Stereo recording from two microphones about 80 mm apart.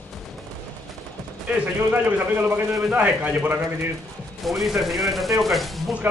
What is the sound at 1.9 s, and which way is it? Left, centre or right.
A man's voice, right.